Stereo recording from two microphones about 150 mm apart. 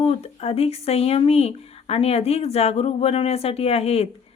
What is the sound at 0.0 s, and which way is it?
A woman's voice, 45° left (ahead or behind).